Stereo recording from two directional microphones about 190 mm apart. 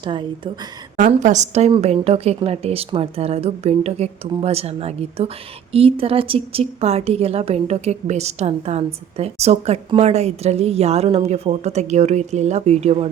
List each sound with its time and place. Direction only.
0.0 s a woman's voice: 25° right (ahead or behind)
0.9 s a woman's voice: 40° right (ahead or behind)